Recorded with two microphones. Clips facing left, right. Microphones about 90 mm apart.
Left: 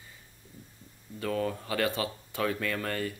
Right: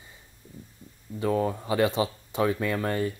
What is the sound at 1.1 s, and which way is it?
Speech, 20° right (ahead or behind).